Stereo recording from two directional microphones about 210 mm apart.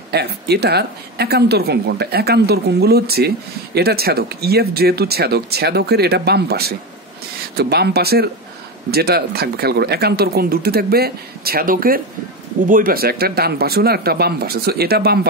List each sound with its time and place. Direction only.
0.1 s speech: 50° right (ahead or behind)